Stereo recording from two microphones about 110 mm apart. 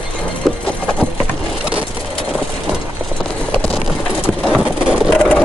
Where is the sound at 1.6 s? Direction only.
10° right (ahead or behind).